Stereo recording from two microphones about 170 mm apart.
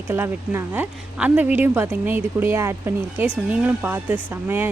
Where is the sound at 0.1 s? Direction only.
15° right (ahead or behind).